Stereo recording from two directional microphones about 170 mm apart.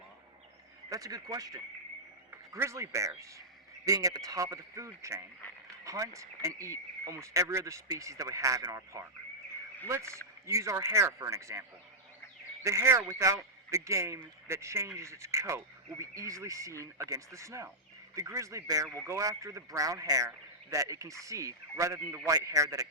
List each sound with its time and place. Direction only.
0.9 s a man's voice: 20° right (ahead or behind)
12.6 s a man's voice: 15° right (ahead or behind)